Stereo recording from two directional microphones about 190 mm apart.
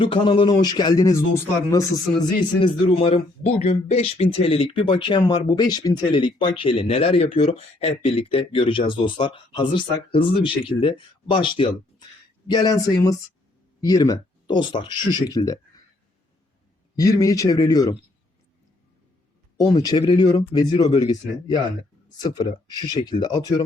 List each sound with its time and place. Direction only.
0.0 s a man's voice: 25° left (ahead or behind)
17.0 s speech: 20° left (ahead or behind)
19.5 s a man's voice: 20° left (ahead or behind)
22.9 s a man's voice: 20° left (ahead or behind)